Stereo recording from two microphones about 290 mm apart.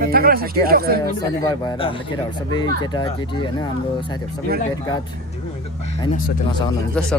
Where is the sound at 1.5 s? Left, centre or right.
Centre.